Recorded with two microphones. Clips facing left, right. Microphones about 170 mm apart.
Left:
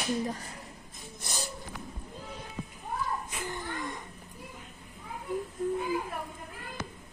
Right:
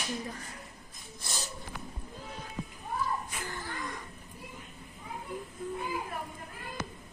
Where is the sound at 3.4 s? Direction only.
20° left (ahead or behind).